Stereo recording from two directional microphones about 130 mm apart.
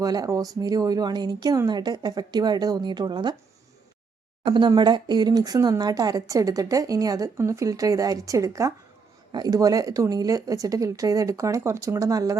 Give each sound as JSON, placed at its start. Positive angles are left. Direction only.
{"t": 0.0, "sound": "speech", "side_deg": -30}
{"t": 4.4, "sound": "speech", "side_deg": -35}